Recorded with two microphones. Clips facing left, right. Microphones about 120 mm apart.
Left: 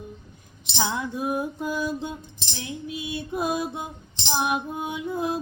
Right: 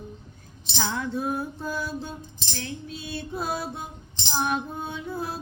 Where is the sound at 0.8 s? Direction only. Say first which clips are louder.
Left 1 dB; 15° left (ahead or behind).